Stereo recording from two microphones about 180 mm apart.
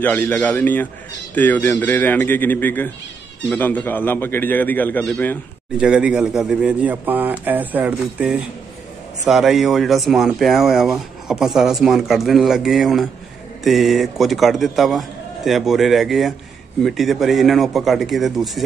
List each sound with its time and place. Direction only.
0.0 s a man's voice: 10° left (ahead or behind)
5.8 s a man's voice: 5° right (ahead or behind)